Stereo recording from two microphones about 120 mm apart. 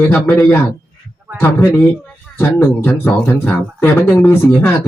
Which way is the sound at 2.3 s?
15° left (ahead or behind).